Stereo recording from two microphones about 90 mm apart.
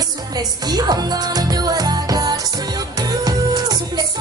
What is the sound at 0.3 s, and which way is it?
Music, 45° right (ahead or behind).